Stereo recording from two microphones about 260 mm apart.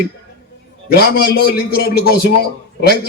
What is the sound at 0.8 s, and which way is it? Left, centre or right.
A man's voice, left.